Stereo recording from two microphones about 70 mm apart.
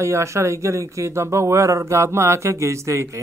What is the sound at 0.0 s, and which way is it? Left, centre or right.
Speech, right.